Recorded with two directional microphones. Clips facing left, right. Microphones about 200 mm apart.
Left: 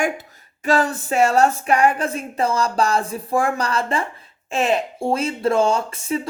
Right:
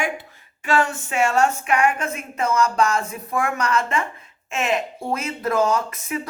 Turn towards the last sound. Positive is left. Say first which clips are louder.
# left 4 dB
turn(degrees=30)  # may be behind; listen again after turning